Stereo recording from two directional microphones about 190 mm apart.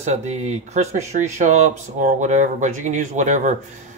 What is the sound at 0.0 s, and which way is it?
Speech, 35° right (ahead or behind).